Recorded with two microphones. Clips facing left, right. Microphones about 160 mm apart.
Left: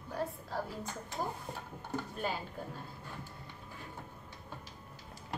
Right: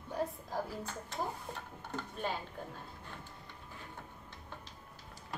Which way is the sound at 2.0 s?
5° left (ahead or behind).